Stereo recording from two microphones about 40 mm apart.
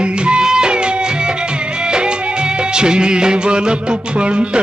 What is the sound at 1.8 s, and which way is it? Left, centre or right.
Music of bollywood, right.